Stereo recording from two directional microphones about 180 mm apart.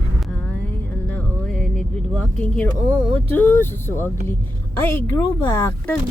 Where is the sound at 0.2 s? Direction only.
5° left (ahead or behind).